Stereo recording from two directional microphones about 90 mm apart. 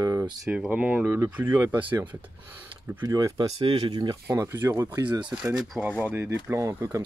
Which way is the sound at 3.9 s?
55° right (ahead or behind).